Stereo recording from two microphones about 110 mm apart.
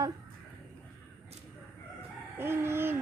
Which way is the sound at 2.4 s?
20° right (ahead or behind).